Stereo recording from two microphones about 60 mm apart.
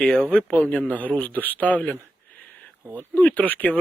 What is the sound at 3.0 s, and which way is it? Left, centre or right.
Speech, left.